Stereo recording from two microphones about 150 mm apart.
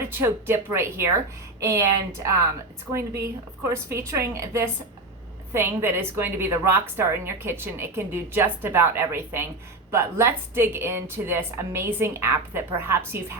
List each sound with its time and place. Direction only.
0.0 s a woman's voice: 15° right (ahead or behind)
3.7 s a woman's voice: 15° right (ahead or behind)